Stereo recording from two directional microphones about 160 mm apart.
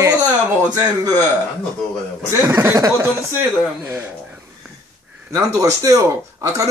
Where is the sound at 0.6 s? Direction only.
25° right (ahead or behind).